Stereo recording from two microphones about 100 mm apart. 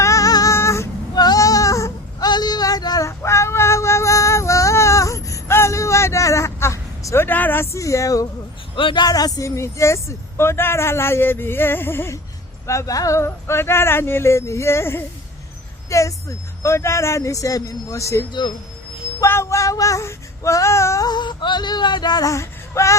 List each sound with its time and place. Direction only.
0.0 s female singing: 35° left (ahead or behind)
1.1 s child singing: 40° left (ahead or behind)
8.7 s a man's voice: 55° left (ahead or behind)
9.0 s speech: 40° left (ahead or behind)
15.9 s child singing: 30° left (ahead or behind)
21.1 s speech: 50° left (ahead or behind)
22.3 s a sound: 30° left (ahead or behind)